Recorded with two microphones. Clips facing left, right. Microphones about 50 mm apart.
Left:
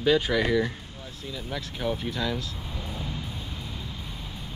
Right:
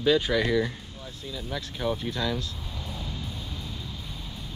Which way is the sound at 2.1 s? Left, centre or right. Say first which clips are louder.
Even; centre.